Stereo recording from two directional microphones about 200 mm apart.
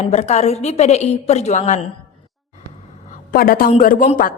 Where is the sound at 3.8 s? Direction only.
45° left (ahead or behind).